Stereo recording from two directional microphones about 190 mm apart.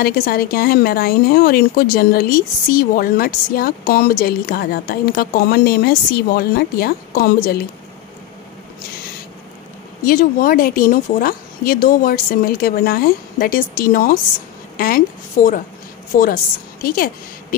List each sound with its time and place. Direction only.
0.0 s speech: 50° left (ahead or behind)
10.0 s a woman's voice: 50° left (ahead or behind)